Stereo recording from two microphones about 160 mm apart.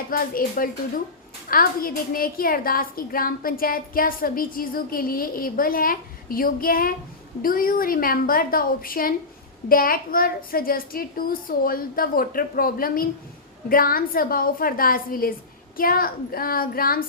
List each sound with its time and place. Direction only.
0.1 s a woman's voice: 65° left (ahead or behind)